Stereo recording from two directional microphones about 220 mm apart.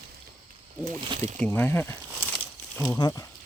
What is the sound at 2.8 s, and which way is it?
Speech, 15° left (ahead or behind).